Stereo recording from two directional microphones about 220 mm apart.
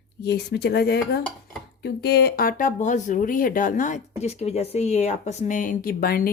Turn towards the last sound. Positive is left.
turn(degrees=40)  # may be behind; listen again after turning